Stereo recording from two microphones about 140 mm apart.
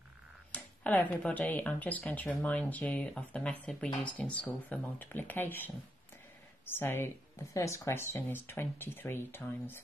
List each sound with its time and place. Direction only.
0.5 s speech: 10° left (ahead or behind)